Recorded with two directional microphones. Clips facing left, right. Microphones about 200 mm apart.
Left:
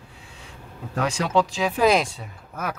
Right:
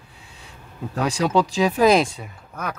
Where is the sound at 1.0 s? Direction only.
40° right (ahead or behind).